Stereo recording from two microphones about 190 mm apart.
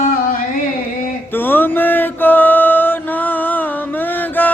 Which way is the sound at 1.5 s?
10° left (ahead or behind).